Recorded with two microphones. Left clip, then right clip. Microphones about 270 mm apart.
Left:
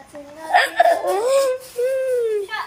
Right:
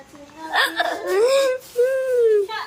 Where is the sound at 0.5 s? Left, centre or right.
Centre.